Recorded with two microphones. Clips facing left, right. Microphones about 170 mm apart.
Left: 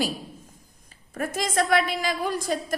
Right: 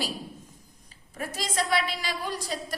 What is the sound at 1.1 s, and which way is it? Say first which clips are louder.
A woman's voice: left 5 dB; 50° left (ahead or behind).